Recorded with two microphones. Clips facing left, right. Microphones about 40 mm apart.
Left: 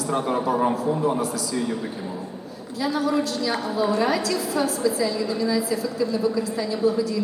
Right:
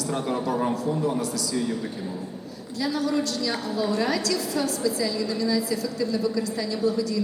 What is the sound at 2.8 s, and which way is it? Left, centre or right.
A woman's voice, centre.